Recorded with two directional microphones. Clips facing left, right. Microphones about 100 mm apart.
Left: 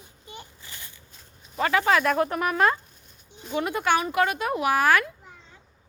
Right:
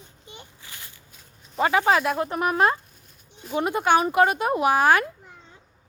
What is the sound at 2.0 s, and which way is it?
Speech, 10° right (ahead or behind).